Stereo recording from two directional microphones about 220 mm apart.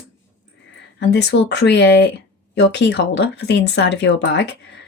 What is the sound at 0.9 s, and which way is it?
Speech, 50° left (ahead or behind).